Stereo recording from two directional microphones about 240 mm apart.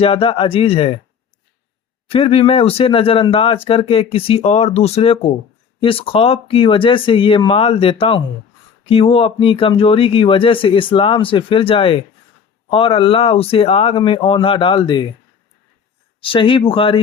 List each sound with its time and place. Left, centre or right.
0.0 s speech: left
2.0 s speech: left
16.2 s speech: left